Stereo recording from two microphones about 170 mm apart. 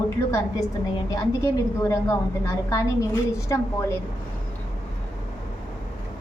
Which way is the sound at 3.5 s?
20° left (ahead or behind).